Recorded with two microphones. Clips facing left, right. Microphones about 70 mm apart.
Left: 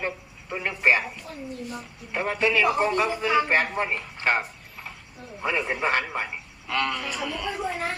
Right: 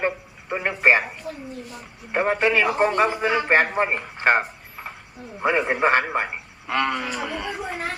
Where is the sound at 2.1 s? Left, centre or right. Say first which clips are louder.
Right 4 dB; right.